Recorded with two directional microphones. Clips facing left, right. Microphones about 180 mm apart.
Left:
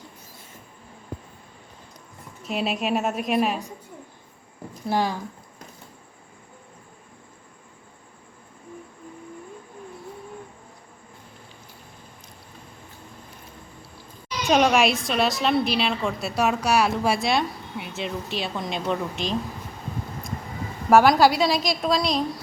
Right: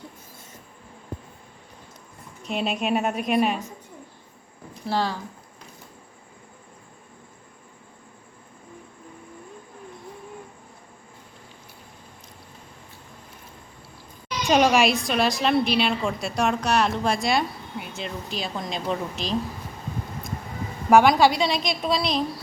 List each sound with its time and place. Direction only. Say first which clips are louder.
2.4 s a woman's voice: even; centre (ahead or behind)
4.9 s speech: left 1 dB; 15° left (ahead or behind)
14.4 s a woman's voice: even; centre (ahead or behind)
20.9 s a woman's voice: even; centre (ahead or behind)